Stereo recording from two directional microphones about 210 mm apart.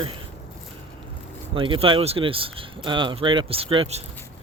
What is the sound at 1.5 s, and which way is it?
Speech, 25° right (ahead or behind).